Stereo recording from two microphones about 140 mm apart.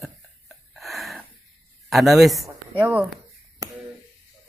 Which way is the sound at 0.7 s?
Centre (ahead or behind).